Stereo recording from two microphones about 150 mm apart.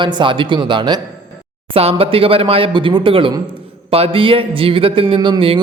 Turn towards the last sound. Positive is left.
turn(degrees=-35)  # may be behind; listen again after turning